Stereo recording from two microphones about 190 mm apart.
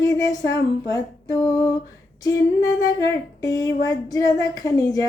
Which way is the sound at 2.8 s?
20° left (ahead or behind).